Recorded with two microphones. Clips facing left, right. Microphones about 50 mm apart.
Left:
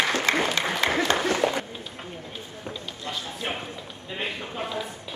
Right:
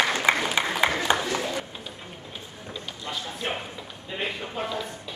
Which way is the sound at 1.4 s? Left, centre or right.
Left.